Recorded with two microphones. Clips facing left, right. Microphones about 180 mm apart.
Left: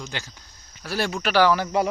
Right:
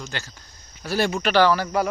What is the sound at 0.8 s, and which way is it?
Speech, centre (ahead or behind).